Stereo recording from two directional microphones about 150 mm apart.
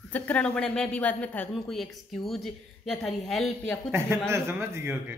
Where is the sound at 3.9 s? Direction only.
15° right (ahead or behind).